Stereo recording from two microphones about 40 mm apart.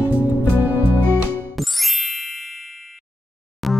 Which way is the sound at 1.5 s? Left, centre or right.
Centre.